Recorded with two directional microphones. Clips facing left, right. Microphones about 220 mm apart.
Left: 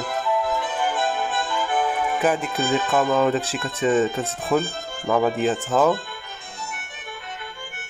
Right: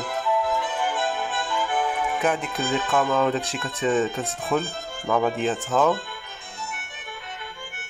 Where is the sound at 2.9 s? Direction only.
5° left (ahead or behind).